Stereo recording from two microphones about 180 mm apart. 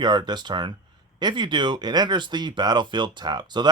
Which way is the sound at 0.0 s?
25° right (ahead or behind).